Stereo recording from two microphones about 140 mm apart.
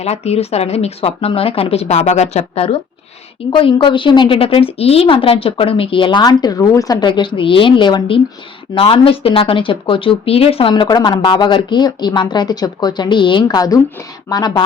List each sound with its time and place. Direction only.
0.0 s speech: 50° left (ahead or behind); by 14.6 s 30° left (ahead or behind)